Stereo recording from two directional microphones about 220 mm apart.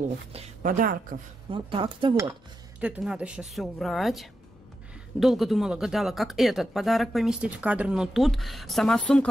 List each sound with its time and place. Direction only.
0.3 s a woman's voice: 35° right (ahead or behind)
1.5 s a woman's voice: 25° right (ahead or behind)
2.8 s speech: 5° right (ahead or behind)